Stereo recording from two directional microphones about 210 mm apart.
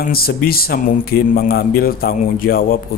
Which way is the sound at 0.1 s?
45° left (ahead or behind).